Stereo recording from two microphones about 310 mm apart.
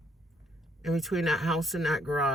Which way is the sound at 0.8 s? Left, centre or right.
Centre.